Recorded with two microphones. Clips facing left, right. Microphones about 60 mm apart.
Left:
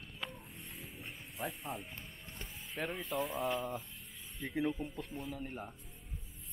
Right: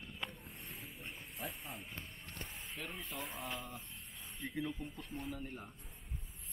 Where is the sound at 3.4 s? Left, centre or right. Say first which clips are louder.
Left 9 dB; left.